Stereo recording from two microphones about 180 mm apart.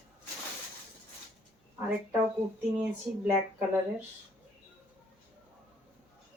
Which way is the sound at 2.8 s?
5° right (ahead or behind).